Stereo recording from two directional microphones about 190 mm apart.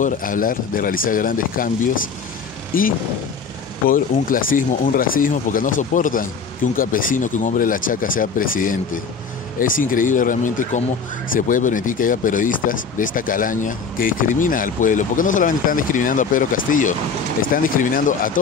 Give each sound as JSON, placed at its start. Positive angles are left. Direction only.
{"t": 0.0, "sound": "speech", "side_deg": 45}
{"t": 2.7, "sound": "speech", "side_deg": 50}